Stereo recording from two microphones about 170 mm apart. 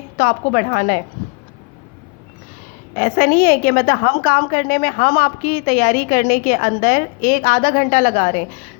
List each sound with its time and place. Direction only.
0.2 s a woman's voice: 50° left (ahead or behind)
2.9 s a woman's voice: 50° left (ahead or behind)